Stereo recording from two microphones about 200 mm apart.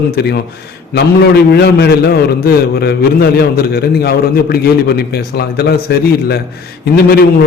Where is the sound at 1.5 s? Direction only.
55° left (ahead or behind).